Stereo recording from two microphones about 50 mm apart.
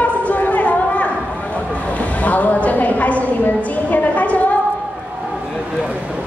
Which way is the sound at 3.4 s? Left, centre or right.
Left.